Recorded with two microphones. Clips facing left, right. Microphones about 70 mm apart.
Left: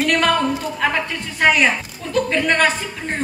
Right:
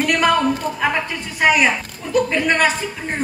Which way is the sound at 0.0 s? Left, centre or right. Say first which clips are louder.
Even; centre.